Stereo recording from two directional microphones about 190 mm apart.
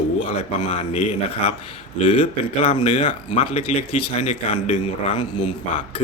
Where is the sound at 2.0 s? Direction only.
30° left (ahead or behind).